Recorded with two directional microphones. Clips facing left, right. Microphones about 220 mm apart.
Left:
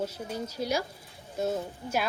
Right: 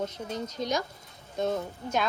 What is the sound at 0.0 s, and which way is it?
A woman's voice, 10° left (ahead or behind).